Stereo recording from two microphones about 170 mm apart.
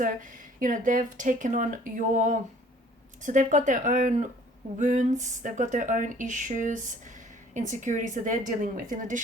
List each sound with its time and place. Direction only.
0.0 s speech: 50° right (ahead or behind)